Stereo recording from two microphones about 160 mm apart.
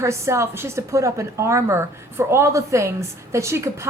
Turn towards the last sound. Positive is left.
turn(degrees=-15)  # may be behind; listen again after turning